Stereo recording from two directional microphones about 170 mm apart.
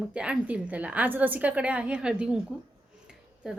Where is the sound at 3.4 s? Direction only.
5° right (ahead or behind).